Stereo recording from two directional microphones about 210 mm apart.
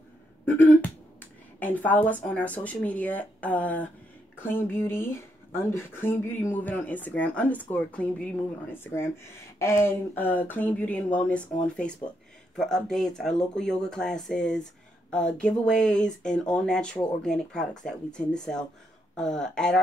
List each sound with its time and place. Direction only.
0.5 s speech: 10° left (ahead or behind)